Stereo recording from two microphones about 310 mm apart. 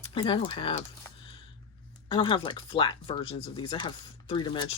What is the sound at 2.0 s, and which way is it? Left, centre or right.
Speech, centre.